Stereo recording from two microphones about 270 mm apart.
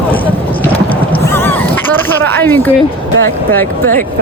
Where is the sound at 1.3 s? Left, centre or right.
Centre.